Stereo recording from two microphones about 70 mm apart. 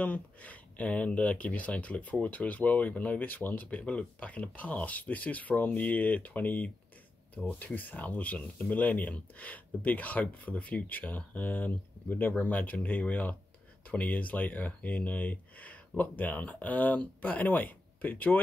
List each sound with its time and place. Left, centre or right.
0.0 s speech: left